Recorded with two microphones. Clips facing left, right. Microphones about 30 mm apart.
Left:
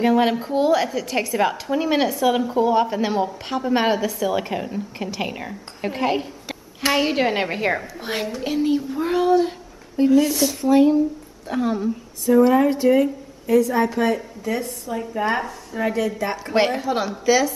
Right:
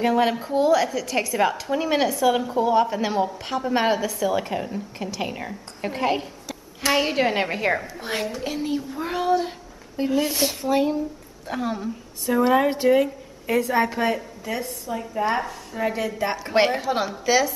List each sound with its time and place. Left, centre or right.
0.0 s a woman's voice: centre
12.3 s speech: right
12.5 s speech: right
12.8 s a woman's voice: right
13.8 s a woman's voice: centre